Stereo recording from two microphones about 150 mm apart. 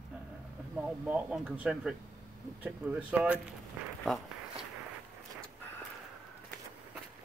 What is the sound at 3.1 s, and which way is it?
Speech, 10° right (ahead or behind).